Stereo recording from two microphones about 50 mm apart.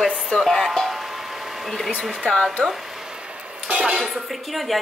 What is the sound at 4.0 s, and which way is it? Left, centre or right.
Speech, centre.